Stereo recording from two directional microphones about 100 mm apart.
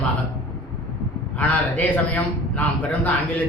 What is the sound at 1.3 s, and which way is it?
A man's voice, 15° left (ahead or behind).